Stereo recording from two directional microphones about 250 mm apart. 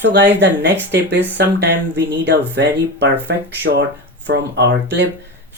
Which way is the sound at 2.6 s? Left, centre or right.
Right.